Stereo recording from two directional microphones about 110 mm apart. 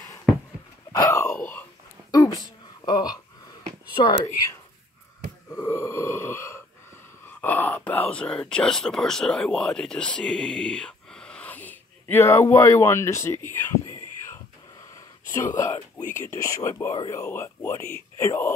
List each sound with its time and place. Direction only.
1.0 s a sound: 20° left (ahead or behind)
2.0 s a sound: 30° left (ahead or behind)
3.9 s speech: 45° left (ahead or behind)
5.5 s burping: 20° left (ahead or behind)
7.2 s speech: 15° left (ahead or behind)
15.3 s speech: 30° left (ahead or behind)